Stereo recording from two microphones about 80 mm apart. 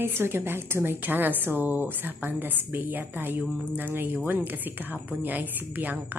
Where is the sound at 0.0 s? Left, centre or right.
Right.